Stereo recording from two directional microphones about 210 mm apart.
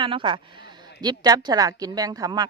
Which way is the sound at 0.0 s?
25° right (ahead or behind).